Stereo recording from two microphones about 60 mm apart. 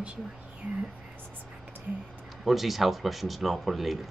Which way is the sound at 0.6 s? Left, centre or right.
Right.